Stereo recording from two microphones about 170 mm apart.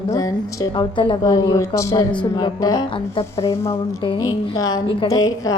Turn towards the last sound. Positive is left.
turn(degrees=20)  # may be behind; listen again after turning